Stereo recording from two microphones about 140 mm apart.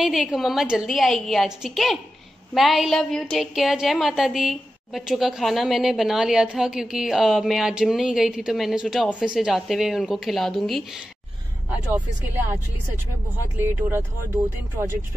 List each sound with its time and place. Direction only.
0.0 s a woman's voice: 5° right (ahead or behind)
13.6 s speech: 15° right (ahead or behind)